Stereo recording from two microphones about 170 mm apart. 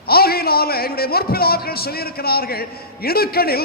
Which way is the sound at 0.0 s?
65° left (ahead or behind).